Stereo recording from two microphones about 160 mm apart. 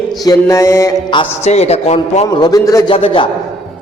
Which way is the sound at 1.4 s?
40° left (ahead or behind).